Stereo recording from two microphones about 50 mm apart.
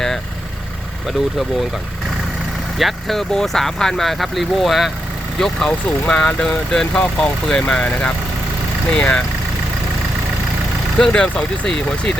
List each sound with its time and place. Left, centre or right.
1.0 s speech: centre
2.7 s speech: centre
5.4 s speech: centre
7.8 s speech: left
10.9 s speech: centre